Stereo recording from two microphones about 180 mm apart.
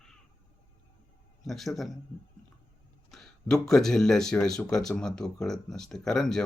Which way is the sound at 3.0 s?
Centre (ahead or behind).